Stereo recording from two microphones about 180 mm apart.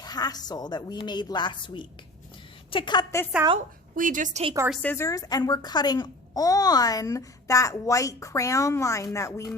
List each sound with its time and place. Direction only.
0.0 s a woman's voice: 20° left (ahead or behind)
3.9 s a woman's voice: 45° right (ahead or behind)
4.7 s a woman's voice: 10° left (ahead or behind)